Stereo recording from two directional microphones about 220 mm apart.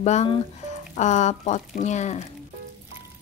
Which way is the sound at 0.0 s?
30° left (ahead or behind).